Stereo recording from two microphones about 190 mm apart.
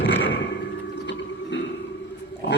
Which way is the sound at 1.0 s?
70° left (ahead or behind).